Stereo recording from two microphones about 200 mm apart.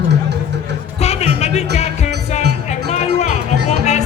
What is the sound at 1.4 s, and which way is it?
Music, 35° left (ahead or behind).